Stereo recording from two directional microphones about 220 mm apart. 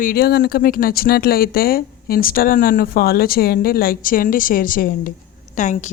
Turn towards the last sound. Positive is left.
turn(degrees=35)  # may be behind; listen again after turning